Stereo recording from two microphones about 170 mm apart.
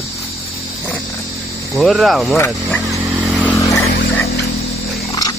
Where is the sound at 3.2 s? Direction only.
5° left (ahead or behind).